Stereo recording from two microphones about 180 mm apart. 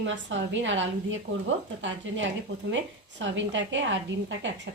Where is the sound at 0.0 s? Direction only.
90° right.